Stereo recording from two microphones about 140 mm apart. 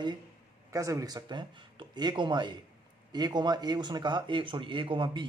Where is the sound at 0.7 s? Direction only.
25° right (ahead or behind).